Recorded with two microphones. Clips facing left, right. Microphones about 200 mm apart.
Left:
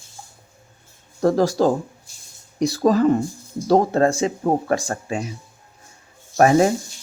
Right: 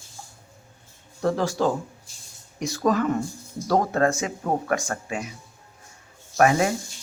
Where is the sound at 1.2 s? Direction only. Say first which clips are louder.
Left 6 dB; 40° left (ahead or behind).